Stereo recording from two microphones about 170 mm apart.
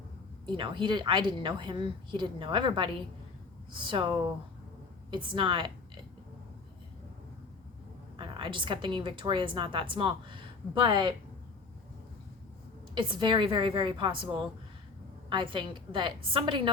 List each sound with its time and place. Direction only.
0.4 s a woman's voice: 30° right (ahead or behind)
5.1 s a woman's voice: 30° right (ahead or behind)
8.1 s a woman's voice: 30° right (ahead or behind)
12.9 s a woman's voice: 30° right (ahead or behind)
15.3 s a woman's voice: 30° right (ahead or behind)